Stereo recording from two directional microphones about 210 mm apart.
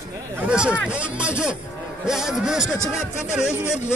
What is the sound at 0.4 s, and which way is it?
Speech, 5° right (ahead or behind).